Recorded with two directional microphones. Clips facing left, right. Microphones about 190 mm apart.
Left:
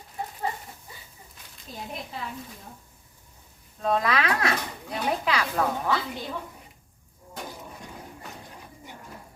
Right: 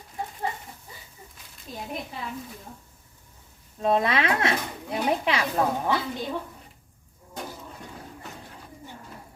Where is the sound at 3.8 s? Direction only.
25° right (ahead or behind).